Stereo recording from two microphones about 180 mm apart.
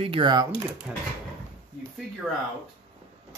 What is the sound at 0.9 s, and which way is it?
Speech, 5° right (ahead or behind).